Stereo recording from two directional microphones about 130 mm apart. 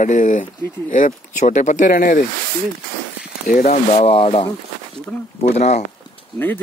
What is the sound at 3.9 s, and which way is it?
Speech, 50° left (ahead or behind).